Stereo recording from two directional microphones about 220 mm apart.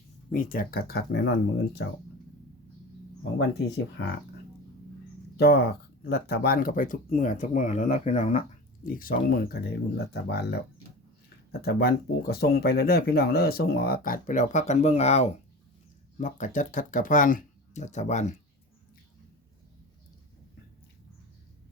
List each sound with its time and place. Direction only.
0.3 s speech: 40° left (ahead or behind)
4.0 s speech: 50° left (ahead or behind)
5.4 s speech: 45° left (ahead or behind)
11.6 s speech: 45° left (ahead or behind)